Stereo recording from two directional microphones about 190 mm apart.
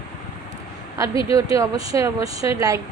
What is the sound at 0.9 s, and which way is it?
Speech, 15° right (ahead or behind).